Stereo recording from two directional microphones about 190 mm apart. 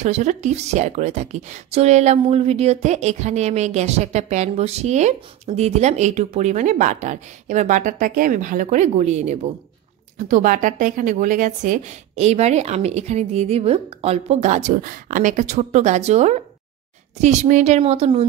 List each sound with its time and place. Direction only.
0.0 s a woman's voice: 35° right (ahead or behind)